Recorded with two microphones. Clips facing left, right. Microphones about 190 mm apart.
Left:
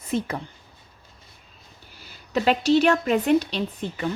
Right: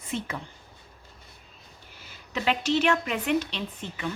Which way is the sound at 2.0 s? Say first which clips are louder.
Left 8 dB; 40° left (ahead or behind).